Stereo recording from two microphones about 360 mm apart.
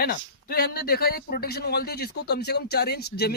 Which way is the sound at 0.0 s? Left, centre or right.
Left.